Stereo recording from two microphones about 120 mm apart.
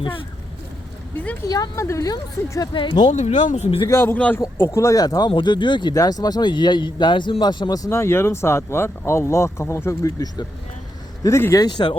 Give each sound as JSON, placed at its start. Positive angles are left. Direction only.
{"t": 1.5, "sound": "speech", "side_deg": 30}
{"t": 2.7, "sound": "a man's voice", "side_deg": 40}
{"t": 3.1, "sound": "speech", "side_deg": 75}
{"t": 3.8, "sound": "a man's voice", "side_deg": 20}
{"t": 11.6, "sound": "a man's voice", "side_deg": 40}